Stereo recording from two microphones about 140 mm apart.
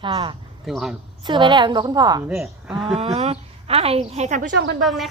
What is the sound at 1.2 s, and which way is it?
Speech, 35° right (ahead or behind).